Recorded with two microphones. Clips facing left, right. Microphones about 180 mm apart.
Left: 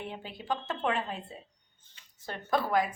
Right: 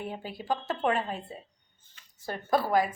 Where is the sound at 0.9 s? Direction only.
45° right (ahead or behind).